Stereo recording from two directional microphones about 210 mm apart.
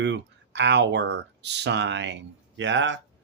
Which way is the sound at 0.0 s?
55° right (ahead or behind).